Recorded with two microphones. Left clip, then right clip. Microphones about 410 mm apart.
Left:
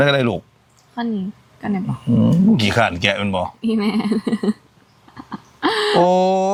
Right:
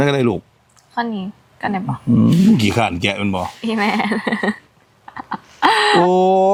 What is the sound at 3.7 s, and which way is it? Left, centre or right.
Speech, right.